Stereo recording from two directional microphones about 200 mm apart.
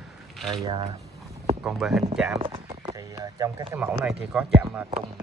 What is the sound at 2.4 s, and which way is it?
Clip-clop, 25° right (ahead or behind).